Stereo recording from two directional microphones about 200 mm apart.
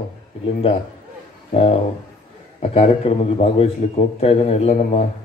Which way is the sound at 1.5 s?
30° left (ahead or behind).